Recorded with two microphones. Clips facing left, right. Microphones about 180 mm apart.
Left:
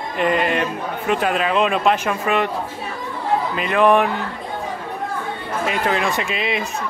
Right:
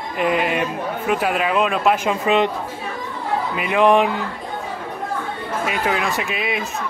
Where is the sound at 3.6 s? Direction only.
15° right (ahead or behind).